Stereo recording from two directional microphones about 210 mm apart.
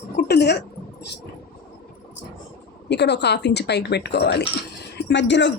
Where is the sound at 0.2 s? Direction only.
50° left (ahead or behind).